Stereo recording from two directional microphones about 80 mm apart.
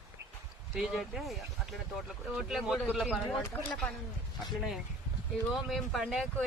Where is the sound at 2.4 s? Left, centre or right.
Centre.